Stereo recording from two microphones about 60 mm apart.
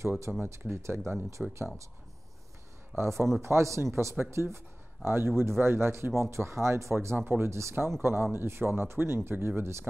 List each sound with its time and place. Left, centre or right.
0.4 s speech: right
1.4 s speech: centre
3.0 s speech: right
7.2 s speech: right